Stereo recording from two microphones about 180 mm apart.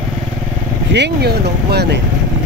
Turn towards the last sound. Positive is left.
turn(degrees=-65)  # may be behind; listen again after turning